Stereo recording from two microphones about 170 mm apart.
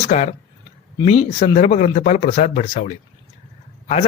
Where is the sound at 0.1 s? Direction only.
40° left (ahead or behind).